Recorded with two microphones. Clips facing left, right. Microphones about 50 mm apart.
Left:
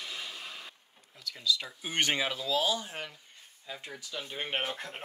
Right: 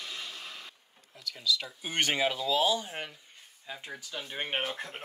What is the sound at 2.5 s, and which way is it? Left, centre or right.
Speech, right.